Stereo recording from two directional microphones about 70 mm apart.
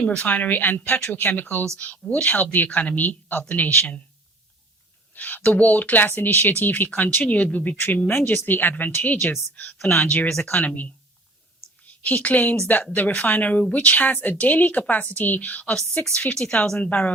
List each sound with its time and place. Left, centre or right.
0.2 s a woman's voice: left
5.1 s a woman's voice: left
11.9 s a woman's voice: left
15.7 s a woman's voice: centre